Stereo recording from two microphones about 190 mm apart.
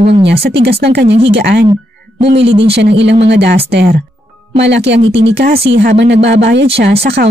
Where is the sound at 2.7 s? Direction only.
60° right (ahead or behind).